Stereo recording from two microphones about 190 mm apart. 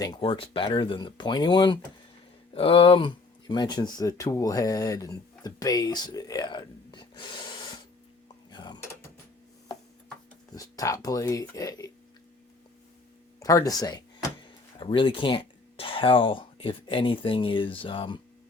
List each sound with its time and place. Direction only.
0.0 s speech: 25° left (ahead or behind)
8.4 s mechanisms: 20° left (ahead or behind)
10.5 s speech: 20° left (ahead or behind)
13.4 s speech: 20° left (ahead or behind)
14.4 s a sound: 25° left (ahead or behind)
15.8 s speech: 30° left (ahead or behind)